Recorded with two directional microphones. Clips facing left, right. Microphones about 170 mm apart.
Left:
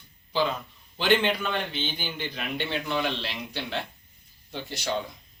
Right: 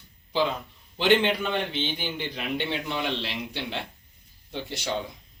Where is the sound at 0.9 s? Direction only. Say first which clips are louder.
Right 2 dB; 25° right (ahead or behind).